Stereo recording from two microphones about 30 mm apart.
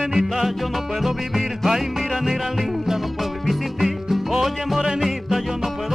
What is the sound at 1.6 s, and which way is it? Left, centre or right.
Music, centre.